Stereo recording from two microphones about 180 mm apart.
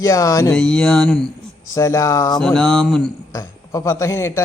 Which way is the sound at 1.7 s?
15° left (ahead or behind).